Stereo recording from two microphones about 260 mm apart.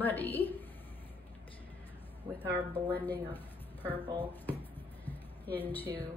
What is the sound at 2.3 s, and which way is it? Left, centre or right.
Speech, centre.